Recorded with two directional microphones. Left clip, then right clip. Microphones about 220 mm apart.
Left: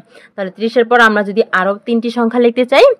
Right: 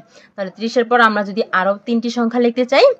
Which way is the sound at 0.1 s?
35° left (ahead or behind).